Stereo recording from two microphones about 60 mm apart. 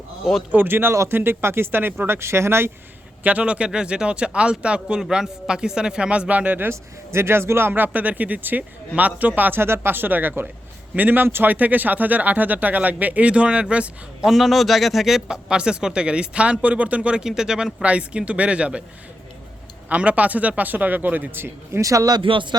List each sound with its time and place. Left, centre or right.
0.5 s speech: right
3.2 s speech: right
6.7 s speech: right
7.7 s speech: right
9.6 s speech: right; by 13.9 s centre
14.3 s speech: centre
17.2 s speech: centre
17.8 s speech: centre
19.9 s speech: right
21.8 s speech: right